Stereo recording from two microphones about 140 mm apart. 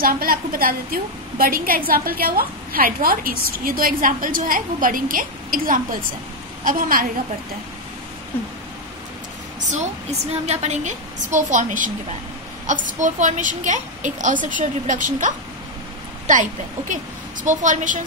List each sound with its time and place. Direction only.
0.0 s a woman's voice: 90° right
10.4 s a woman's voice: 55° right (ahead or behind)